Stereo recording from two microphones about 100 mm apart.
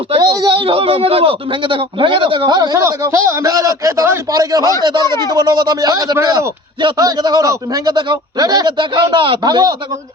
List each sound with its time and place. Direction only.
0.2 s a sound: 40° right (ahead or behind)
0.6 s a man's voice: 70° right (ahead or behind)
2.6 s a man's voice: 40° right (ahead or behind); by 3.5 s 25° right (ahead or behind)
3.5 s a man's voice: 35° right (ahead or behind)